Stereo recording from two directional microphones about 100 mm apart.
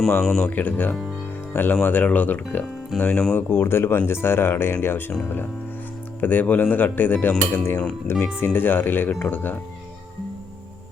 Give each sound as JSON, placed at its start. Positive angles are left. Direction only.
{"t": 0.2, "sound": "speech", "side_deg": 5}
{"t": 3.5, "sound": "speech", "side_deg": 25}
{"t": 6.1, "sound": "speech", "side_deg": 15}